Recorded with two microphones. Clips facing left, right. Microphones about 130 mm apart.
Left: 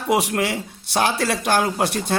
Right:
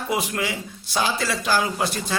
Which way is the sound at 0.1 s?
75° left (ahead or behind).